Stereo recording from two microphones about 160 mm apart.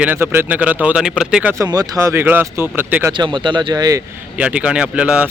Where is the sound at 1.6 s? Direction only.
25° right (ahead or behind).